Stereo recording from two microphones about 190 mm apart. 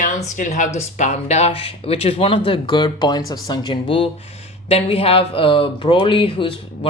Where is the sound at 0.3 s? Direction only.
40° left (ahead or behind).